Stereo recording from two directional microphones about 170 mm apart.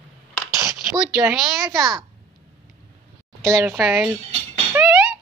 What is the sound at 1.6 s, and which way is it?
Speech, 20° right (ahead or behind).